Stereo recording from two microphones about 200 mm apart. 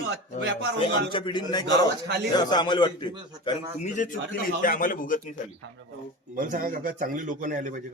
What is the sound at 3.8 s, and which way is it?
A man's voice, 40° left (ahead or behind).